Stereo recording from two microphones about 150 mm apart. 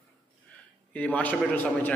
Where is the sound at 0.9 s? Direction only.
10° left (ahead or behind).